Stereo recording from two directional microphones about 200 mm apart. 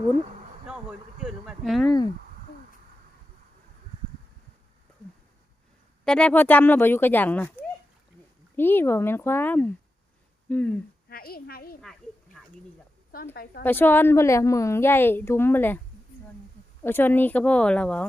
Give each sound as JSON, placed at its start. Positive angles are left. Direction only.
{"t": 0.7, "sound": "a sound", "side_deg": -5}
{"t": 6.1, "sound": "a woman's voice", "side_deg": 5}
{"t": 11.1, "sound": "a woman's voice", "side_deg": 50}
{"t": 11.8, "sound": "a sound", "side_deg": 0}
{"t": 13.3, "sound": "a woman's voice", "side_deg": 50}
{"t": 13.6, "sound": "a woman's voice", "side_deg": 10}
{"t": 16.8, "sound": "a woman's voice", "side_deg": 10}